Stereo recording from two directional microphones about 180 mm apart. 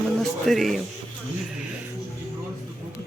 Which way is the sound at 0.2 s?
Centre (ahead or behind).